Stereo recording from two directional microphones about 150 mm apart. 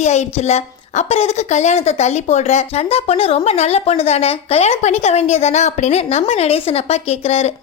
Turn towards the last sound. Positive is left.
turn(degrees=45)  # may be behind; listen again after turning